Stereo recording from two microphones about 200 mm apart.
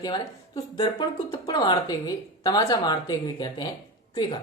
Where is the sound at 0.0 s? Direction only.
20° left (ahead or behind).